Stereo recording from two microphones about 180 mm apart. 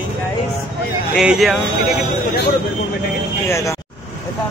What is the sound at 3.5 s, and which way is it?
Speech, 15° left (ahead or behind).